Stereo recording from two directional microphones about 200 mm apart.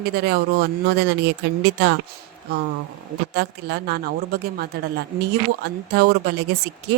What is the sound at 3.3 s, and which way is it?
A woman's voice, 55° right (ahead or behind).